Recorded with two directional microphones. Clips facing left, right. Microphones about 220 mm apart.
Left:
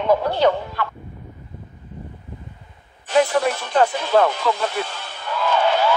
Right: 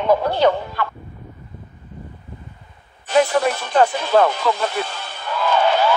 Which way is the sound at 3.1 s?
40° right (ahead or behind).